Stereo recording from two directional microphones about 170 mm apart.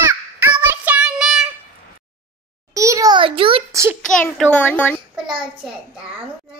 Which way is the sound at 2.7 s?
20° right (ahead or behind).